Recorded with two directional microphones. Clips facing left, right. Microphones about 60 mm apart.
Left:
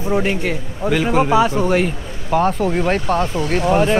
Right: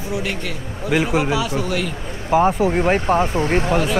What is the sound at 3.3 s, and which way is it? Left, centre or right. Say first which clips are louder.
Speech: right 1 dB; right.